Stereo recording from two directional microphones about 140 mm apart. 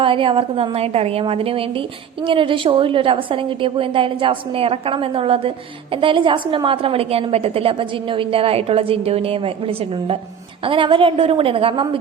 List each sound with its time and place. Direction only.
0.0 s a woman's voice: 40° right (ahead or behind)